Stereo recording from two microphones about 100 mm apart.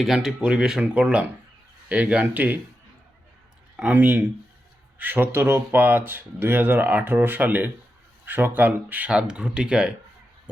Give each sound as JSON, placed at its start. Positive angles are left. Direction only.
{"t": 0.0, "sound": "speech", "side_deg": -5}
{"t": 3.9, "sound": "speech", "side_deg": -20}